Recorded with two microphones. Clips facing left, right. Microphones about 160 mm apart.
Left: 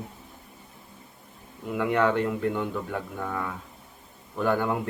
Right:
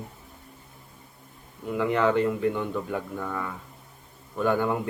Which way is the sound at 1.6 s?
5° left (ahead or behind).